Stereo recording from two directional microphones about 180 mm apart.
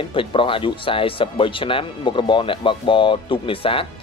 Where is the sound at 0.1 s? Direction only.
30° left (ahead or behind).